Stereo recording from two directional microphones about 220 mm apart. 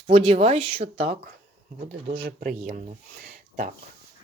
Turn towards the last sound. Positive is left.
turn(degrees=-30)  # may be behind; listen again after turning